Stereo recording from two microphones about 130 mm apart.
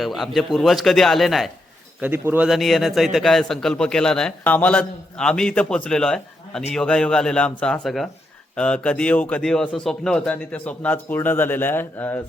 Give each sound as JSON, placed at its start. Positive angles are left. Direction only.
{"t": 0.0, "sound": "a man's voice", "side_deg": 0}
{"t": 2.0, "sound": "speech", "side_deg": -15}
{"t": 2.5, "sound": "a man's voice", "side_deg": 0}